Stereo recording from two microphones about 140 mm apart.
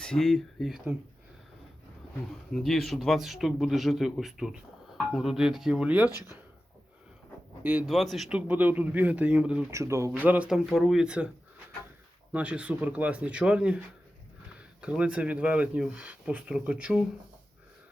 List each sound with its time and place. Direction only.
0.0 s a man's voice: 5° left (ahead or behind)
2.5 s a man's voice: centre (ahead or behind)
7.6 s speech: 10° right (ahead or behind)
7.9 s speech: centre (ahead or behind)
9.6 s speech: 20° right (ahead or behind)
12.3 s speech: 10° right (ahead or behind)
14.8 s speech: 5° right (ahead or behind)